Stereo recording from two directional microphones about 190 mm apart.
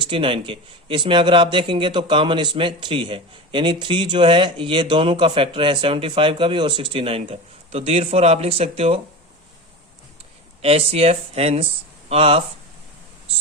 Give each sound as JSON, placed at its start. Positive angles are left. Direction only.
{"t": 0.0, "sound": "a man's voice", "side_deg": -25}
{"t": 10.6, "sound": "speech", "side_deg": -30}